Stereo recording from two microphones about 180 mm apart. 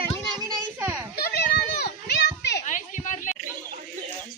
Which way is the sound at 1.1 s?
60° left (ahead or behind).